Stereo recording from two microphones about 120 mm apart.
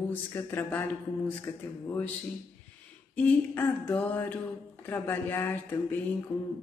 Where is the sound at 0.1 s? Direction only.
15° left (ahead or behind).